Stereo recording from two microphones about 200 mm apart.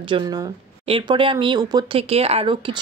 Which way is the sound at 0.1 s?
20° right (ahead or behind).